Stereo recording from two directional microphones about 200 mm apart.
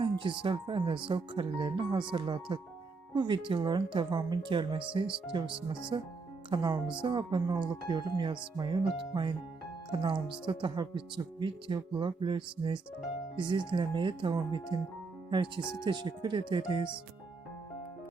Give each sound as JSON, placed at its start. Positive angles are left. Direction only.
{"t": 0.0, "sound": "speech", "side_deg": -25}